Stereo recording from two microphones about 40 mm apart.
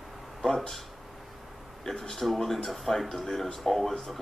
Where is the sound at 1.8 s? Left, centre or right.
Centre.